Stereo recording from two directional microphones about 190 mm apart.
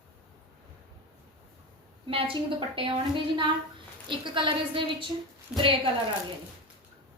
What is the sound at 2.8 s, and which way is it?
A woman's voice, 25° right (ahead or behind).